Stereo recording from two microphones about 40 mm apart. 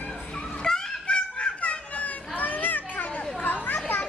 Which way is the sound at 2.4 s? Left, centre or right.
Left.